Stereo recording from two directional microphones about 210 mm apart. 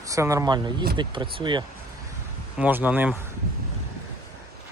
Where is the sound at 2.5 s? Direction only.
5° right (ahead or behind).